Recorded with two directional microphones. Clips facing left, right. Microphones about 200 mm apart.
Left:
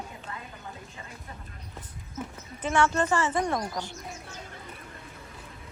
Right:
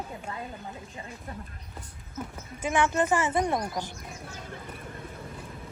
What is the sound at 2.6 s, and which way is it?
A woman's voice, 15° right (ahead or behind).